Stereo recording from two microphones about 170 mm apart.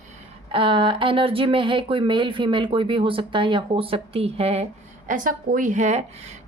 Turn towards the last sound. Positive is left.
turn(degrees=-40)  # may be behind; listen again after turning